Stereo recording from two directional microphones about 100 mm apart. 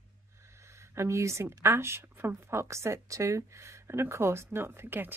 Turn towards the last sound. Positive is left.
turn(degrees=-20)  # may be behind; listen again after turning